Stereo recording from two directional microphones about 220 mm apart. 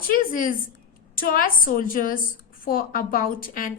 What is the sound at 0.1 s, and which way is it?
A woman's voice, 40° left (ahead or behind).